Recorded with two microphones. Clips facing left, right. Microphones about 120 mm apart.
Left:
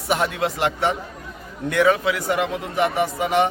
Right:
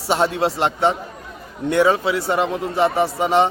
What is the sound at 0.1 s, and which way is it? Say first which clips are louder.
A man's voice: right 3 dB; 30° right (ahead or behind).